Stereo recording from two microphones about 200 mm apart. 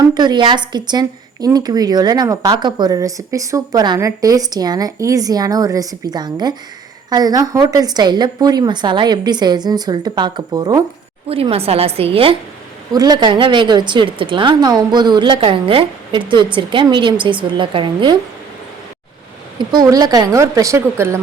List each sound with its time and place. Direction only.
0.1 s speech: 20° right (ahead or behind)
19.5 s speech: 20° right (ahead or behind)